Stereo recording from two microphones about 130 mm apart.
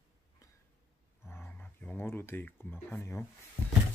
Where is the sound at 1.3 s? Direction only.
15° left (ahead or behind).